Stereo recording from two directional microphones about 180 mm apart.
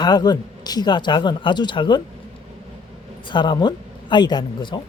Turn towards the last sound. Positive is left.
turn(degrees=25)  # may be behind; listen again after turning